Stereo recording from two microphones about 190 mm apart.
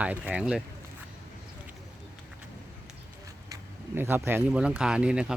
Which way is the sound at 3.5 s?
10° right (ahead or behind).